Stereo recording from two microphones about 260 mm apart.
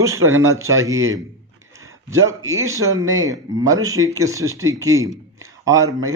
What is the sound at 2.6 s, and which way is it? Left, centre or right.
Speech, right.